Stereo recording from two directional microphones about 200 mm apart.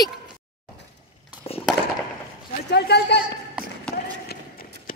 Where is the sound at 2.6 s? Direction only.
55° left (ahead or behind).